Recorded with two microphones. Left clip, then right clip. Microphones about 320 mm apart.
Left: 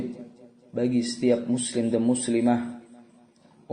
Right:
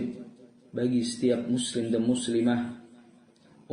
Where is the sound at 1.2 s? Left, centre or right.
Left.